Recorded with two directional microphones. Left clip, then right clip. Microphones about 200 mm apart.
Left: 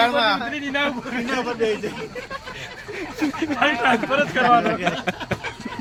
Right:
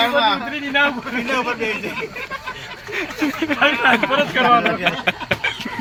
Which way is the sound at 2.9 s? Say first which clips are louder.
Right 4 dB; 5° left (ahead or behind).